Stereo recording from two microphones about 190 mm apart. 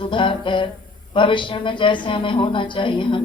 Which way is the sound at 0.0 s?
25° left (ahead or behind).